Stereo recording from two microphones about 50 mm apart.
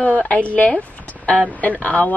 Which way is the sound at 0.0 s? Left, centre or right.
Left.